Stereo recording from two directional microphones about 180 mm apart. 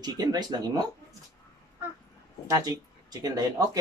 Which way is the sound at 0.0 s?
20° right (ahead or behind).